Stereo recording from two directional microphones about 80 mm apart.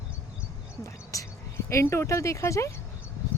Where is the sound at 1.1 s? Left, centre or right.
Left.